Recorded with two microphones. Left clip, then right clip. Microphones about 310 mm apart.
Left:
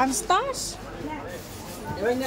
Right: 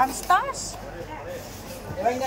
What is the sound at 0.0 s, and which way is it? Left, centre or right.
Speech, centre.